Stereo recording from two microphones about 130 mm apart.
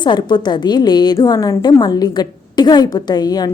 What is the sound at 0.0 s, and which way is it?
A woman's voice, 35° left (ahead or behind).